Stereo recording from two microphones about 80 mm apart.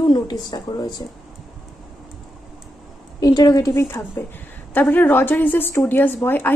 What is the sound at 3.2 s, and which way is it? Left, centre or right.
Speech, left.